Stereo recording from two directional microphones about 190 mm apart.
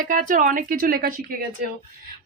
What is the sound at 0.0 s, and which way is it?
Speech, 45° right (ahead or behind).